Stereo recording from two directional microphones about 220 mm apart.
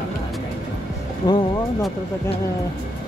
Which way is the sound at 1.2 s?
15° left (ahead or behind).